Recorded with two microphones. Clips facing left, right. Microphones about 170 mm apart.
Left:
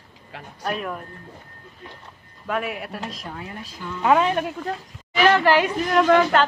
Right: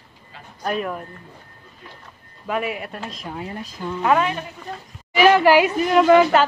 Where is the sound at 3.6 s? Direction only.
40° right (ahead or behind).